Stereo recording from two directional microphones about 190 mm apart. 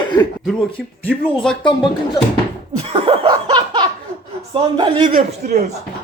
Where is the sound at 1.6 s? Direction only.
25° left (ahead or behind).